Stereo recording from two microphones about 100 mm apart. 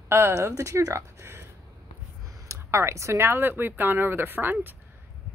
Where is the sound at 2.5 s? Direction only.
30° right (ahead or behind).